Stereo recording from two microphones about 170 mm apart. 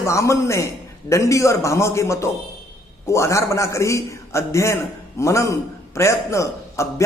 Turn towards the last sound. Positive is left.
turn(degrees=15)  # may be behind; listen again after turning